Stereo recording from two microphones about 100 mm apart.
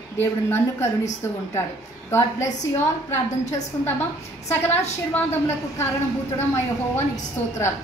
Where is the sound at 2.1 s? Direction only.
25° left (ahead or behind).